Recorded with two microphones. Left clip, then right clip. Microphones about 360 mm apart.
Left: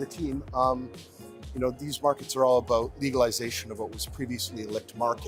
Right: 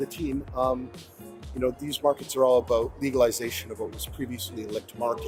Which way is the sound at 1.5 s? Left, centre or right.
Left.